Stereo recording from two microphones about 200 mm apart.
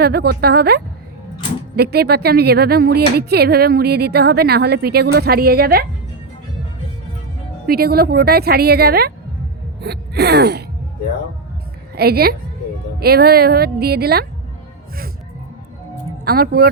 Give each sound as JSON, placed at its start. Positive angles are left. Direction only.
{"t": 0.0, "sound": "a woman's voice", "side_deg": -50}
{"t": 7.7, "sound": "a woman's voice", "side_deg": -50}
{"t": 9.8, "sound": "a sound", "side_deg": -55}
{"t": 11.9, "sound": "a woman's voice", "side_deg": -50}
{"t": 16.2, "sound": "speech", "side_deg": -50}